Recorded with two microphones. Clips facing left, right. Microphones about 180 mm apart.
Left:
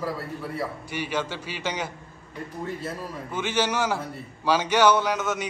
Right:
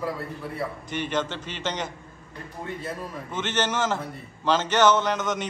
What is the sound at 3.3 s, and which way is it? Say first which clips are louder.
A man's voice: left 1 dB; 10° left (ahead or behind).